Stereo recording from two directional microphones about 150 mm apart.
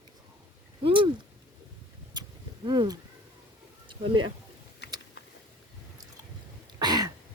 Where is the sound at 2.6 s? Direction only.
30° right (ahead or behind).